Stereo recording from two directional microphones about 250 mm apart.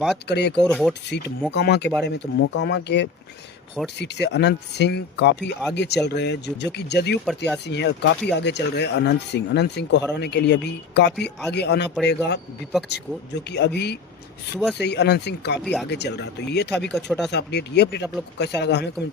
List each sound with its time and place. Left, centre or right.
0.3 s speech: left
0.6 s speech: centre
1.1 s speech: left
7.3 s speech: centre
7.6 s speech: left
15.6 s speech: centre
15.9 s speech: left
16.9 s speech: centre
17.3 s speech: left